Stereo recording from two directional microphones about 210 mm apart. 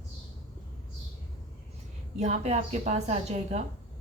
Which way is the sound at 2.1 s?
30° right (ahead or behind).